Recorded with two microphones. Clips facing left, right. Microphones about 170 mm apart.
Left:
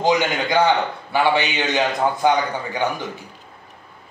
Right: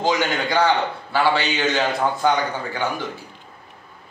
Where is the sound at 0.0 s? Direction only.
15° left (ahead or behind).